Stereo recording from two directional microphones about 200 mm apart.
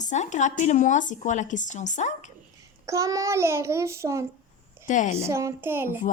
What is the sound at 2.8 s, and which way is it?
Child singing, 15° right (ahead or behind).